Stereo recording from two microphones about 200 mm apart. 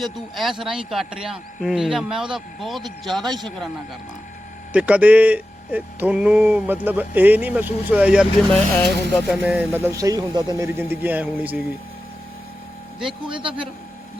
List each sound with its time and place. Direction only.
0.6 s speech: centre (ahead or behind)
4.7 s a man's voice: 5° right (ahead or behind)
13.2 s a man's voice: 25° right (ahead or behind)